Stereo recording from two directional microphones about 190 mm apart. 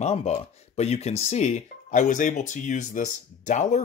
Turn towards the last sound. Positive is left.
turn(degrees=40)  # may be behind; listen again after turning